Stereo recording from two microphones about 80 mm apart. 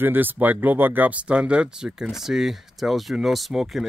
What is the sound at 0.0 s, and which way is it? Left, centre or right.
Speech, right.